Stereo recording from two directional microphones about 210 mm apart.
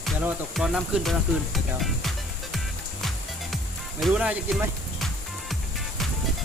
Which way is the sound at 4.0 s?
5° right (ahead or behind).